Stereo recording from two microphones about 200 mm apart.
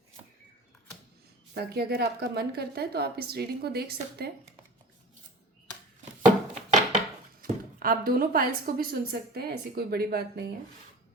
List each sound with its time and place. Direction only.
1.5 s a woman's voice: 50° right (ahead or behind)
6.2 s a sound: 35° right (ahead or behind)
7.4 s a woman's voice: 45° right (ahead or behind)